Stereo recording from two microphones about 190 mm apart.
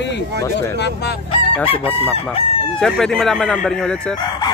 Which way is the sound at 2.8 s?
Centre (ahead or behind).